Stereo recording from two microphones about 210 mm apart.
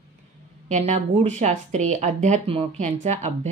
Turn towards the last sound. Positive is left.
turn(degrees=-35)  # may be behind; listen again after turning